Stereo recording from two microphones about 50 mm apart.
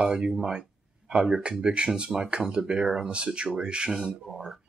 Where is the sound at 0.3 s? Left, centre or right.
Centre.